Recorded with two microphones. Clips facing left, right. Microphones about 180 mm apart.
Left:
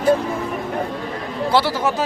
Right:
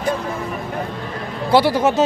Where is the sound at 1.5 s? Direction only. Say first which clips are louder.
Right 5 dB; 15° right (ahead or behind).